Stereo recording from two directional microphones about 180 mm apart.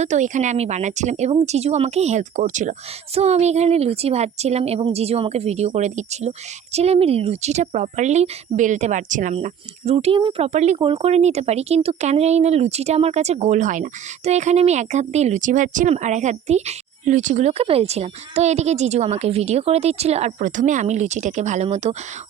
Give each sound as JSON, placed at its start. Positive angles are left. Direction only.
{"t": 0.0, "sound": "speech", "side_deg": -40}